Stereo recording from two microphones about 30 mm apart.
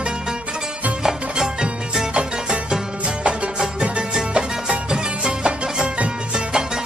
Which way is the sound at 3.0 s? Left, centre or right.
Right.